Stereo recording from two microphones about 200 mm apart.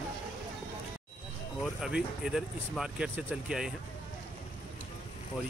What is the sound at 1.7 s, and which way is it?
Speech, 5° right (ahead or behind).